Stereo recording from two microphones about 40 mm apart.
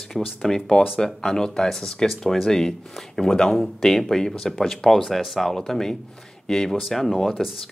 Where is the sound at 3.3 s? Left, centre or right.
Centre.